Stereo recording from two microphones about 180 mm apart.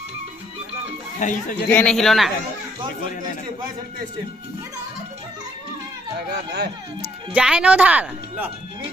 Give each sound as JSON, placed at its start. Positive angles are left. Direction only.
{"t": 1.2, "sound": "speech", "side_deg": 45}
{"t": 1.7, "sound": "speech", "side_deg": 5}
{"t": 6.1, "sound": "speech", "side_deg": -70}
{"t": 7.0, "sound": "speech", "side_deg": -5}